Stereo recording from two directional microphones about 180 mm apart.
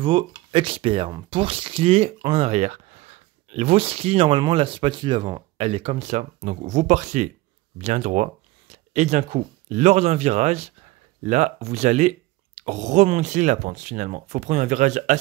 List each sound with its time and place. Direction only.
0.0 s speech: 30° right (ahead or behind)